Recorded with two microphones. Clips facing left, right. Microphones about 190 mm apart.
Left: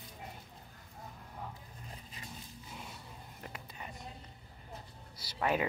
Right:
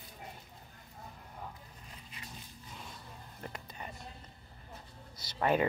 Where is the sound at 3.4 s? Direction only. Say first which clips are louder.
Right 3 dB; 5° left (ahead or behind).